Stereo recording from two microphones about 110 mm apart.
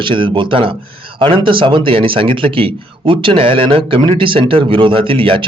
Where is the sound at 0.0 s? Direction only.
50° right (ahead or behind).